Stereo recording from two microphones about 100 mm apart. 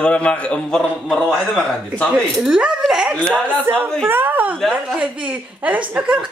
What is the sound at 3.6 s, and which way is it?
Speech, 15° right (ahead or behind).